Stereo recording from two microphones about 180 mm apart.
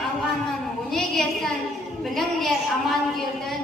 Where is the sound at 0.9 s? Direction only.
Centre (ahead or behind).